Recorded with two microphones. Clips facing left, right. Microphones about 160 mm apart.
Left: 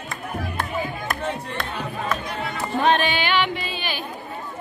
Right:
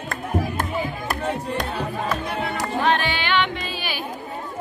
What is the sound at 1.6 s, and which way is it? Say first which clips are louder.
Music: right 3 dB; 35° right (ahead or behind).